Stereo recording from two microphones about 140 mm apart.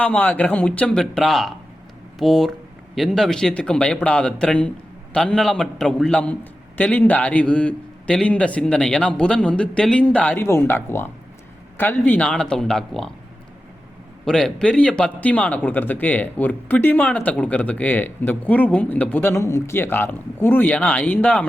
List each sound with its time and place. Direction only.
0.0 s speech: 10° left (ahead or behind)
14.3 s speech: 5° left (ahead or behind)